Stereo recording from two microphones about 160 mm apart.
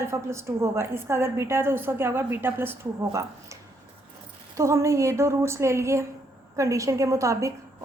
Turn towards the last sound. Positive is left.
turn(degrees=-20)  # may be behind; listen again after turning